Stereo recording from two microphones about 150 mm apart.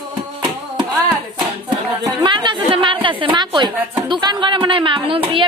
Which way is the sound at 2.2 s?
30° right (ahead or behind).